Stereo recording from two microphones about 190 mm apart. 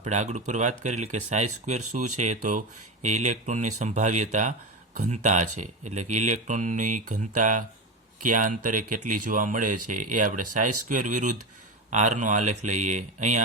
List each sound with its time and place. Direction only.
0.0 s speech: 40° right (ahead or behind)